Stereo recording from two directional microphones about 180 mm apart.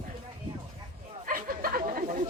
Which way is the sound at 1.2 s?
50° right (ahead or behind).